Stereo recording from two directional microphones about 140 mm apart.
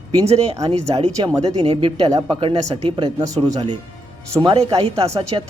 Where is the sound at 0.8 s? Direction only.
50° right (ahead or behind).